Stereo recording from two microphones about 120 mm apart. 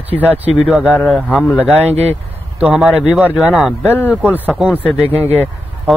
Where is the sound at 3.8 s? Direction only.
15° left (ahead or behind).